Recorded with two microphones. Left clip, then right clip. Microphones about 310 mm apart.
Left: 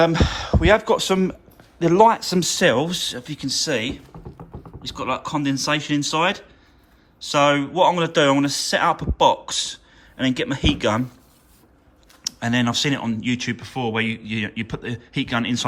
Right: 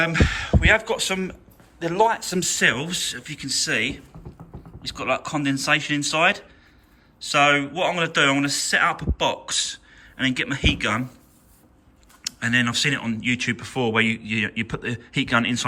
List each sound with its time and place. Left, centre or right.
0.0 s speech: centre
12.2 s speech: centre